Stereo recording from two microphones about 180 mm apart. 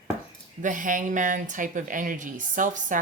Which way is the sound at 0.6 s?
45° right (ahead or behind).